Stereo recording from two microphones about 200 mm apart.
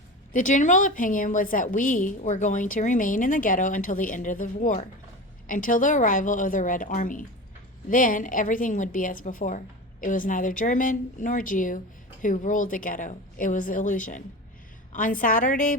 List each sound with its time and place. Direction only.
0.3 s a woman's voice: 40° left (ahead or behind)